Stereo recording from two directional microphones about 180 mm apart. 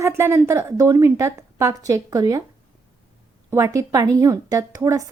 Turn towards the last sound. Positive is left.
turn(degrees=-15)  # may be behind; listen again after turning